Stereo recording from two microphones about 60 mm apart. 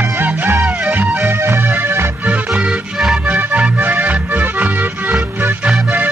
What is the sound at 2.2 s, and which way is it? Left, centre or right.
Music, right.